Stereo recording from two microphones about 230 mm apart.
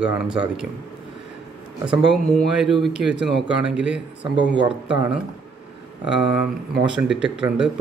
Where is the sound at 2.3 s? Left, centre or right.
Centre.